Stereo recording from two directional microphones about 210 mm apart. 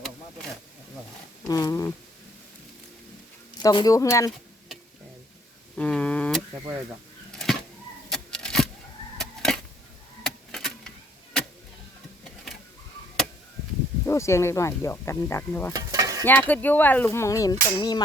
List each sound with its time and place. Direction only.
1.5 s speech: 15° left (ahead or behind)
3.6 s speech: 20° left (ahead or behind)
5.7 s a sound: 5° left (ahead or behind)
14.0 s speech: 15° left (ahead or behind)
15.7 s stir: 15° right (ahead or behind)
16.2 s speech: 10° left (ahead or behind)